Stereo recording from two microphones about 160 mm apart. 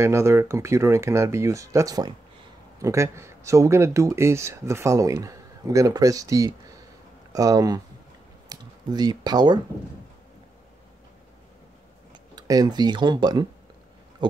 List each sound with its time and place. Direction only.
0.0 s speech: 15° right (ahead or behind)
12.4 s speech: 25° right (ahead or behind)